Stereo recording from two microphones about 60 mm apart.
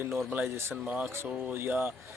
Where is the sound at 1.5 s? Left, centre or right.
Right.